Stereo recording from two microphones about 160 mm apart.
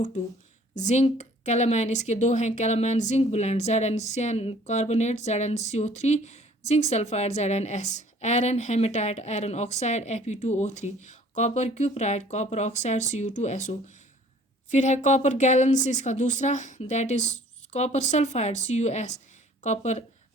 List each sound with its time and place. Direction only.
0.7 s speech: 50° left (ahead or behind)